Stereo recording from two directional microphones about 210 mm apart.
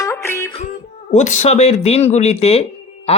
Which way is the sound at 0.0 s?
15° left (ahead or behind).